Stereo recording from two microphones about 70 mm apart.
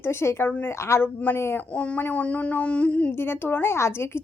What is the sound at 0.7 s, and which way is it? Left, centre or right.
Speech, left.